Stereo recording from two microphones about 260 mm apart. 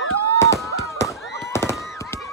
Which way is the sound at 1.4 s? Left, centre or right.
Centre.